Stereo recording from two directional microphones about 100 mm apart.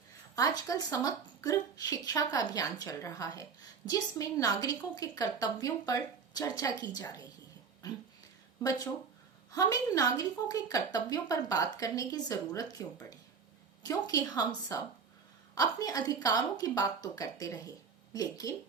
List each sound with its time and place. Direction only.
0.3 s speech: 35° left (ahead or behind)
9.5 s speech: 40° left (ahead or behind)